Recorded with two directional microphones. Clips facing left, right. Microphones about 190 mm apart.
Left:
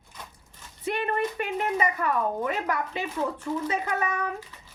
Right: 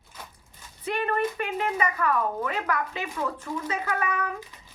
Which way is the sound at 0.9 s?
25° left (ahead or behind).